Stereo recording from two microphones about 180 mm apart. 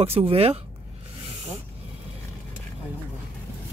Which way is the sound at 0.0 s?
35° right (ahead or behind).